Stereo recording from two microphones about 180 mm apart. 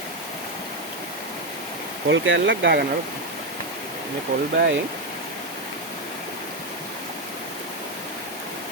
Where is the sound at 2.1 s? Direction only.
90° right.